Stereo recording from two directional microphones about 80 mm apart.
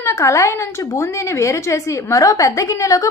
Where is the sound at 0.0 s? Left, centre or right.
Left.